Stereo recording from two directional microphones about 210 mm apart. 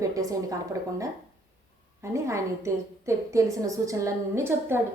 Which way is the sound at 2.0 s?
15° right (ahead or behind).